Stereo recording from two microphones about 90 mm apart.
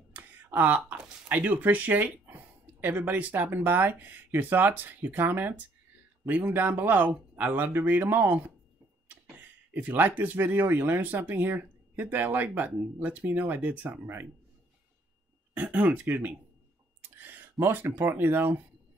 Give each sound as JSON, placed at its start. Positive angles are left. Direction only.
{"t": 0.1, "sound": "speech", "side_deg": -20}
{"t": 15.5, "sound": "speech", "side_deg": -15}